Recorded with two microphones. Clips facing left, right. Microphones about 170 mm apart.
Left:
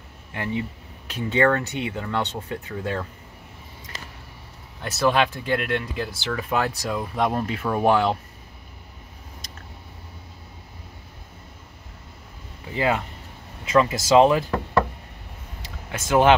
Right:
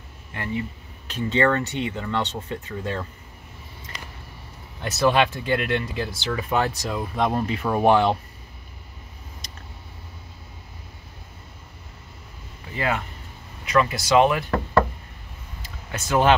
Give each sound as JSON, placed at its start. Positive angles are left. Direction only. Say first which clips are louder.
{"t": 0.3, "sound": "speech", "louder": "left 1 dB", "side_deg": 15}
{"t": 5.0, "sound": "speech", "louder": "right 1 dB", "side_deg": 0}
{"t": 12.7, "sound": "speech", "louder": "left 3 dB", "side_deg": 20}
{"t": 15.9, "sound": "speech", "louder": "left 2 dB", "side_deg": 15}